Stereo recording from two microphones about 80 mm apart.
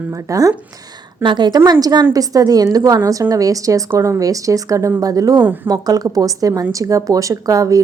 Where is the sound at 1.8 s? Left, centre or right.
Right.